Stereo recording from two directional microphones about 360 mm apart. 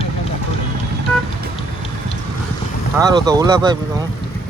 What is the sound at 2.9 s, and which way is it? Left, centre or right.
Speech, centre.